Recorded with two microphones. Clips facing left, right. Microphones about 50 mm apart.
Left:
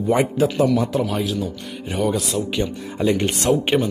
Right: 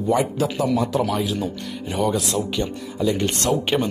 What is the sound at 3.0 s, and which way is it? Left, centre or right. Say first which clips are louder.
Speech: left 2 dB; left.